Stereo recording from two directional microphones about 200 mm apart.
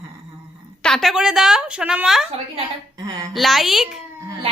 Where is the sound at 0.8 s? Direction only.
Centre (ahead or behind).